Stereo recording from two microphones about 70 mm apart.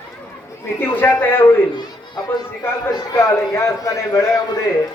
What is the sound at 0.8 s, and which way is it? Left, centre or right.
Speech, left.